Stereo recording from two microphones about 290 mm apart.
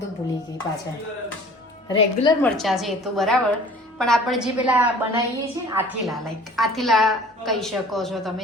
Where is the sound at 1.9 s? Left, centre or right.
Centre.